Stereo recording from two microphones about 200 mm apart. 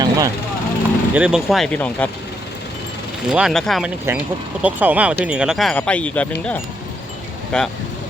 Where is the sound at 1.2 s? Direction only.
5° right (ahead or behind).